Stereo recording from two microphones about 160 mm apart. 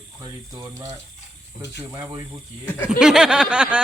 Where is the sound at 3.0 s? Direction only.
5° right (ahead or behind).